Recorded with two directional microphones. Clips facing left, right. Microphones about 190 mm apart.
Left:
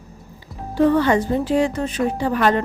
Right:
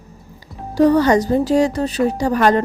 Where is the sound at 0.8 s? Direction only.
40° right (ahead or behind).